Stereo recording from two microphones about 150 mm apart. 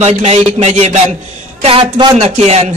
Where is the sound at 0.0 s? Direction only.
45° right (ahead or behind).